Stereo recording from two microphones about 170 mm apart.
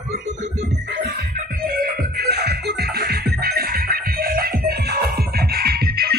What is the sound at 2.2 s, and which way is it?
Music, 70° right (ahead or behind).